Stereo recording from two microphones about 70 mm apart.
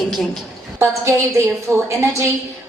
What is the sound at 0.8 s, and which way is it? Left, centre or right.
A woman's voice, right.